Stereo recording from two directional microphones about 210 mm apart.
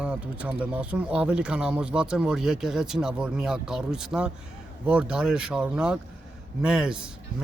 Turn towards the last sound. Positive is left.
turn(degrees=-5)  # may be behind; listen again after turning